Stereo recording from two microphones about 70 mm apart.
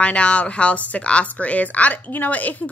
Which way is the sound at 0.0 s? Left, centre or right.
Centre.